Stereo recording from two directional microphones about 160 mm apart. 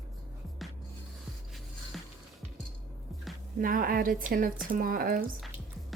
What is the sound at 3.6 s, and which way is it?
A woman's voice, 65° right (ahead or behind).